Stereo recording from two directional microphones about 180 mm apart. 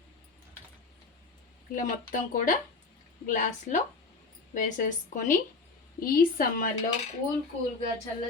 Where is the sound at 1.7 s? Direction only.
45° left (ahead or behind).